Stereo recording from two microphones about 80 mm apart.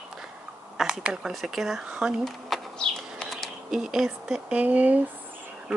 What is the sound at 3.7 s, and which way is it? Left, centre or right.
Speech, centre.